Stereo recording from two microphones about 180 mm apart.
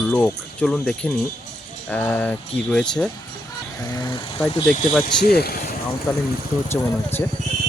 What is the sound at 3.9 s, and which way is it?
Speech, 25° left (ahead or behind).